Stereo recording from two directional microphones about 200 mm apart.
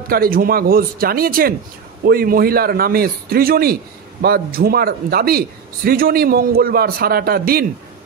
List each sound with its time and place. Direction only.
0.1 s a man's voice: 45° right (ahead or behind)